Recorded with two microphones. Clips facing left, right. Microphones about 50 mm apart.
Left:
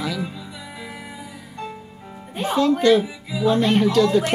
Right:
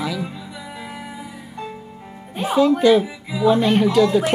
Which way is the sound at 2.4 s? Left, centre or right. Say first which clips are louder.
Right 3 dB; centre.